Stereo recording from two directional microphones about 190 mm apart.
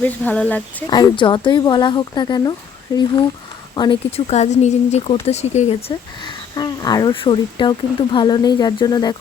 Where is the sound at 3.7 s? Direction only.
25° left (ahead or behind).